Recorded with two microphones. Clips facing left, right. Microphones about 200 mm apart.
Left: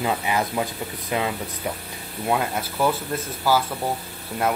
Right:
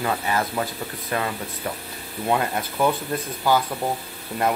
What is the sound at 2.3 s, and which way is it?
Speech, centre (ahead or behind).